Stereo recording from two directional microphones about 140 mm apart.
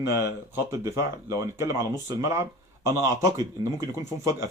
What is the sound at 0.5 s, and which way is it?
Speech, 20° right (ahead or behind).